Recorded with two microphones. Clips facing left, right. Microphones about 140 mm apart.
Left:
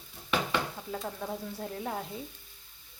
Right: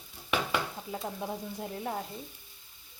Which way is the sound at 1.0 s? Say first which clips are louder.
Right 2 dB; 15° right (ahead or behind).